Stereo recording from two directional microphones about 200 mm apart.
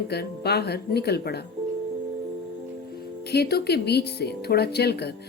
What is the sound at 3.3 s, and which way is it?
A woman's voice, 55° left (ahead or behind).